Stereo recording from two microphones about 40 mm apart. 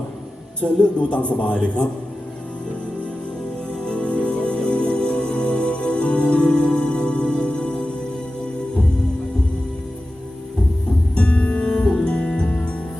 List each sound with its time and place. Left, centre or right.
0.6 s speech: left
3.7 s music: left
11.1 s music: left